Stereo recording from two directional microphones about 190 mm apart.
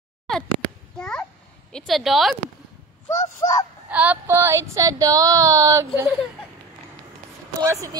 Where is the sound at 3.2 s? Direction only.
20° left (ahead or behind).